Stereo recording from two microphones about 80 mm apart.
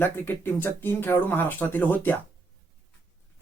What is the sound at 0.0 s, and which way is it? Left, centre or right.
Speech, left.